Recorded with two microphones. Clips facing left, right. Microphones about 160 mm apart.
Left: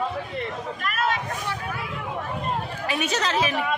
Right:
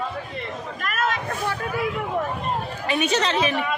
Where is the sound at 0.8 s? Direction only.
45° right (ahead or behind).